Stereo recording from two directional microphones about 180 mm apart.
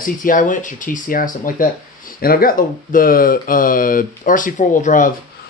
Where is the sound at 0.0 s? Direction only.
50° left (ahead or behind).